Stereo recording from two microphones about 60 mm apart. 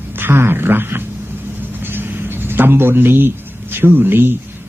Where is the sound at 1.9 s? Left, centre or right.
Right.